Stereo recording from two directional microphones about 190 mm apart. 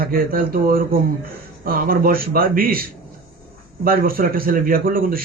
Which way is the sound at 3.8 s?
50° right (ahead or behind).